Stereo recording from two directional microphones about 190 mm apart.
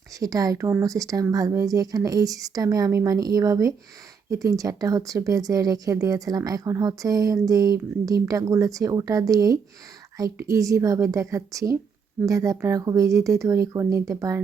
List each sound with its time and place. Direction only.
0.2 s speech: 20° right (ahead or behind)